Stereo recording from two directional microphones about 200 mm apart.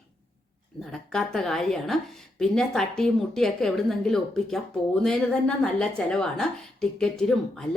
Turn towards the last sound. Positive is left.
turn(degrees=5)  # may be behind; listen again after turning